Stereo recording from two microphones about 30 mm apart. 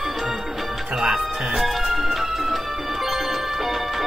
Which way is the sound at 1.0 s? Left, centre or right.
Centre.